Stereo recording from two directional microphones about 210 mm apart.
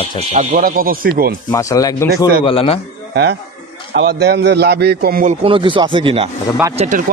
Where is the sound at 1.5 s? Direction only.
15° left (ahead or behind).